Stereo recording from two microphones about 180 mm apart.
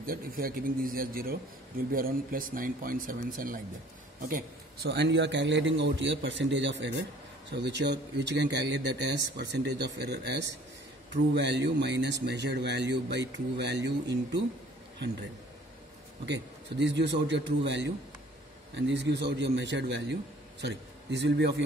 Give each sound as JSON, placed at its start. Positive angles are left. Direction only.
{"t": 0.0, "sound": "a man's voice", "side_deg": -55}
{"t": 4.9, "sound": "a man's voice", "side_deg": -75}
{"t": 16.3, "sound": "a man's voice", "side_deg": -75}